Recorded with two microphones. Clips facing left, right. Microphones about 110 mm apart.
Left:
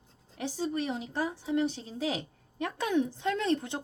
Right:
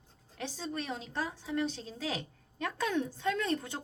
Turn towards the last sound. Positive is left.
turn(degrees=20)  # may be behind; listen again after turning